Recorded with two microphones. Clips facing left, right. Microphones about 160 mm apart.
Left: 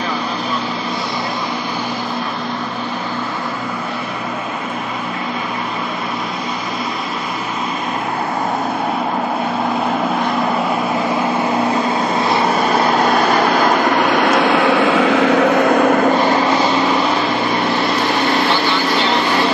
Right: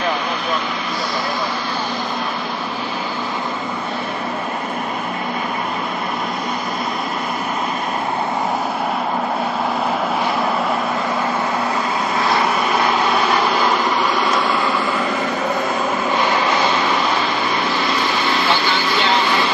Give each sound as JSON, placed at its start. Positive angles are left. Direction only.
{"t": 12.2, "sound": "vehicle", "side_deg": 30}
{"t": 16.1, "sound": "vehicle", "side_deg": 40}